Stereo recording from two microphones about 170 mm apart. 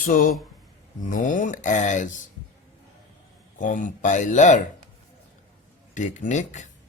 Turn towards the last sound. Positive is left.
turn(degrees=45)  # may be behind; listen again after turning